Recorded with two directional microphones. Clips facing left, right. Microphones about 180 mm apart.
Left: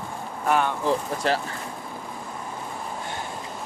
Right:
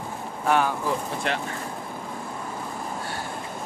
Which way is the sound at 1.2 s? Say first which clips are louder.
Left 5 dB; 35° left (ahead or behind).